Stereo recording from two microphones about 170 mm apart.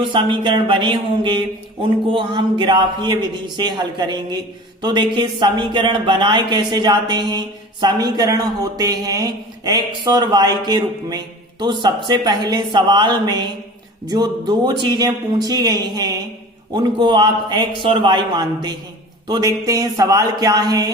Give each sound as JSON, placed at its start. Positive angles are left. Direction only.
{"t": 0.0, "sound": "a man's voice", "side_deg": -30}